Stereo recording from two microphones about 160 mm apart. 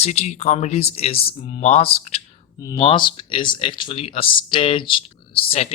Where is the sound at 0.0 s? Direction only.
45° left (ahead or behind).